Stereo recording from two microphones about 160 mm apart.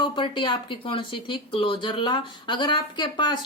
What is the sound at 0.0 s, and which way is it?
A woman's voice, 30° left (ahead or behind).